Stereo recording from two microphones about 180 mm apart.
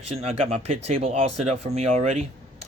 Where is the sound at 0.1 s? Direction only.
35° right (ahead or behind).